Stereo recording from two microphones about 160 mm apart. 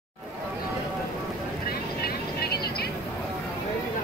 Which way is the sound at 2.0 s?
80° left.